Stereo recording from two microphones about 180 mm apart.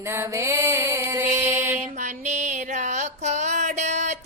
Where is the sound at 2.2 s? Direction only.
40° right (ahead or behind).